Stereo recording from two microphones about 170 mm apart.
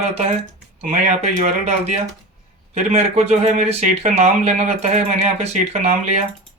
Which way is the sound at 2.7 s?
40° right (ahead or behind).